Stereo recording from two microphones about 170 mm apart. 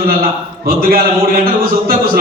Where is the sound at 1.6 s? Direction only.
60° right (ahead or behind).